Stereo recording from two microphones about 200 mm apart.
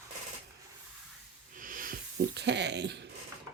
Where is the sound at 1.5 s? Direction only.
45° right (ahead or behind).